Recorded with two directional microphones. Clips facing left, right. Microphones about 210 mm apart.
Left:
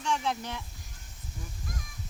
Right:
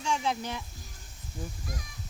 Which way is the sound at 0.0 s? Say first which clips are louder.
Right 1 dB; centre (ahead or behind).